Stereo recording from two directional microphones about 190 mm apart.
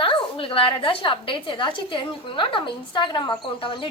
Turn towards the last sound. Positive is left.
turn(degrees=25)  # may be behind; listen again after turning